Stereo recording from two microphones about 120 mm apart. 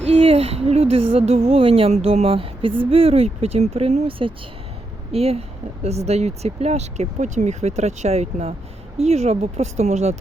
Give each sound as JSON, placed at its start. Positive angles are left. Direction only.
{"t": 0.0, "sound": "speech", "side_deg": -55}